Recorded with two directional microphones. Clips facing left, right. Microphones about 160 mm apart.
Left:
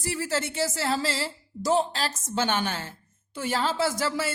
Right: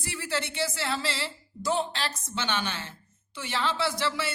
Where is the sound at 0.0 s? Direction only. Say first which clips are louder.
Left 4 dB; 40° left (ahead or behind).